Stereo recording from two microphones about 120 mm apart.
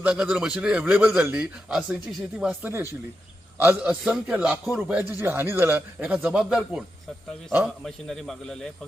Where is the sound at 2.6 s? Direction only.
20° right (ahead or behind).